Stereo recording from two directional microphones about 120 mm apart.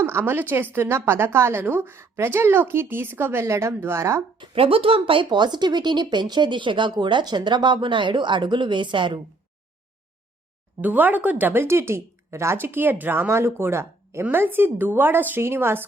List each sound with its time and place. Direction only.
0.0 s a woman's voice: 20° right (ahead or behind)
4.4 s speech: 50° right (ahead or behind)
10.8 s speech: 15° right (ahead or behind)